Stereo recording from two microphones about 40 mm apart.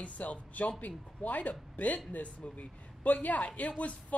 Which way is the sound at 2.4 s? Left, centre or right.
Left.